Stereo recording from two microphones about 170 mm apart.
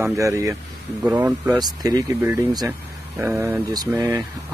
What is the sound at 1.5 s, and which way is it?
Speech, 20° right (ahead or behind).